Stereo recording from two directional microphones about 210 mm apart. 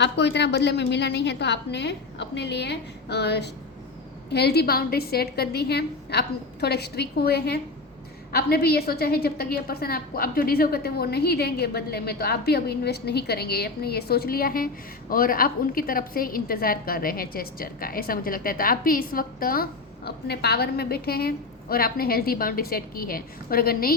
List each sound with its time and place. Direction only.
0.0 s a woman's voice: 55° left (ahead or behind)